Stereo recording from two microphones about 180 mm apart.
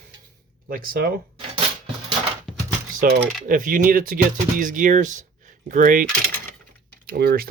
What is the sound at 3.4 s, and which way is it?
Speech, 50° right (ahead or behind).